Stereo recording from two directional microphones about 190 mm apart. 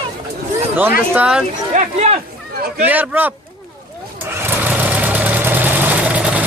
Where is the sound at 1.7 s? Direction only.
35° right (ahead or behind).